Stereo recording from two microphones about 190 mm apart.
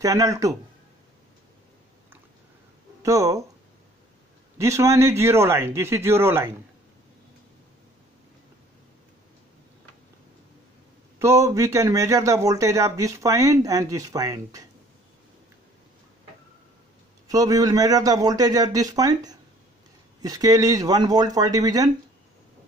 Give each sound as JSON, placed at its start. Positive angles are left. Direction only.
{"t": 0.0, "sound": "a man's voice", "side_deg": -15}
{"t": 3.0, "sound": "speech", "side_deg": -15}
{"t": 4.6, "sound": "a man's voice", "side_deg": -15}
{"t": 11.1, "sound": "a man's voice", "side_deg": -15}
{"t": 17.3, "sound": "a man's voice", "side_deg": -20}